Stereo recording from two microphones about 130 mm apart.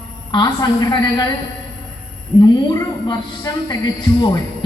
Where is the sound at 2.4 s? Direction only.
30° left (ahead or behind).